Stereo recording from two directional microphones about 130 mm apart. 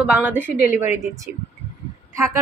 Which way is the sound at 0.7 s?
65° left (ahead or behind).